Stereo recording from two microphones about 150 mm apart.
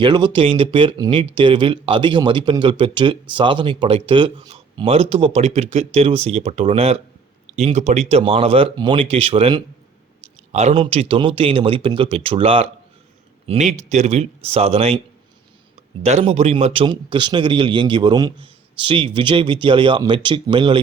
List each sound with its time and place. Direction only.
0.0 s a man's voice: 30° right (ahead or behind)
10.5 s a man's voice: 50° right (ahead or behind)
13.5 s speech: 50° right (ahead or behind)
16.0 s a man's voice: 45° right (ahead or behind)